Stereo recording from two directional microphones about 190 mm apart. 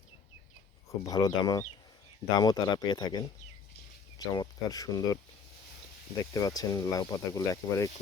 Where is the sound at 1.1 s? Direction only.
20° left (ahead or behind).